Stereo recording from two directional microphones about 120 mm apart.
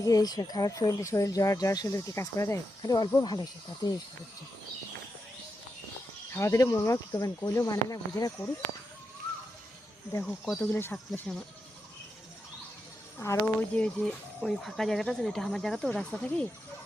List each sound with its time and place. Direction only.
0.0 s speech: 30° left (ahead or behind)
6.3 s speech: 25° left (ahead or behind)
10.2 s speech: 5° left (ahead or behind)
11.3 s speech: 5° left (ahead or behind)
13.1 s speech: 15° left (ahead or behind)